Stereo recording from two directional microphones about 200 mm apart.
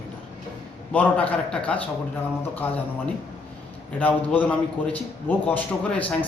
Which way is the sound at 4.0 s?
10° left (ahead or behind).